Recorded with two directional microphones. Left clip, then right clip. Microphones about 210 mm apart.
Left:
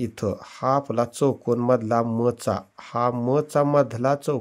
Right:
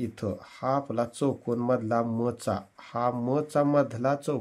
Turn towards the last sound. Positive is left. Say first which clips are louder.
# left 5 dB
turn(degrees=25)  # may be behind; listen again after turning